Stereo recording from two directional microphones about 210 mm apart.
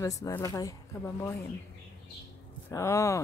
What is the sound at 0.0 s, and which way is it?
Speech, 15° left (ahead or behind).